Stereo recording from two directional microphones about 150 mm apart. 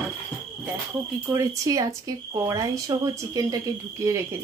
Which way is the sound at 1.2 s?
20° right (ahead or behind).